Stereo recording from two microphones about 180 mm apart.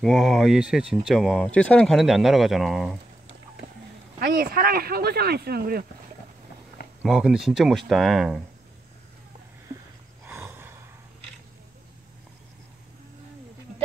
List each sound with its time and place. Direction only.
0.0 s speech: centre (ahead or behind)
4.2 s speech: 60° right (ahead or behind)
7.0 s speech: 5° right (ahead or behind)
10.2 s snort: 10° right (ahead or behind)